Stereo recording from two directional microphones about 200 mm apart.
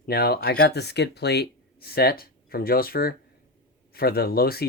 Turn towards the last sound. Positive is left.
turn(degrees=50)  # may be behind; listen again after turning